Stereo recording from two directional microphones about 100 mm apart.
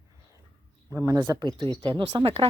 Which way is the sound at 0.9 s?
30° right (ahead or behind).